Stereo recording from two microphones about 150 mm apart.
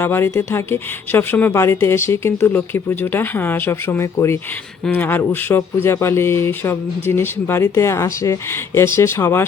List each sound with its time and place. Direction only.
0.0 s speech: 15° left (ahead or behind)